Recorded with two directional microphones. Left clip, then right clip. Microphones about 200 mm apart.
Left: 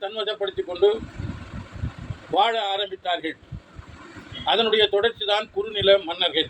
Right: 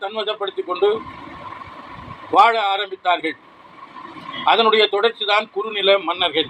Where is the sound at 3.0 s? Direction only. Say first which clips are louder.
Right 7 dB; 10° left (ahead or behind).